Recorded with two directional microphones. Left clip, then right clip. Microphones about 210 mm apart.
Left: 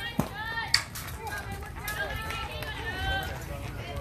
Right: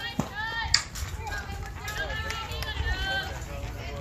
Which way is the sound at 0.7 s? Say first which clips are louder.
Right 1 dB; 45° left (ahead or behind).